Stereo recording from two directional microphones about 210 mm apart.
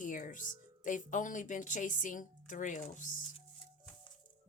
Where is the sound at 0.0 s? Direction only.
40° left (ahead or behind).